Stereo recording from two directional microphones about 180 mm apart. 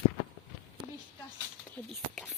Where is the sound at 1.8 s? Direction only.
10° left (ahead or behind).